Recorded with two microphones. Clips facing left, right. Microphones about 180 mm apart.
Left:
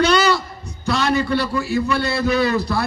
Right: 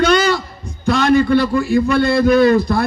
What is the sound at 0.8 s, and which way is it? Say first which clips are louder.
A man's voice: right 6 dB; 50° right (ahead or behind).